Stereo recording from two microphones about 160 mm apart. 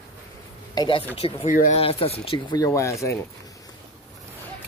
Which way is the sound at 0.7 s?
30° left (ahead or behind).